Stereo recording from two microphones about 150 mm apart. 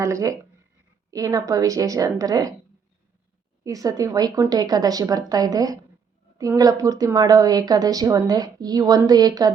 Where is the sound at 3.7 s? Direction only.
25° right (ahead or behind).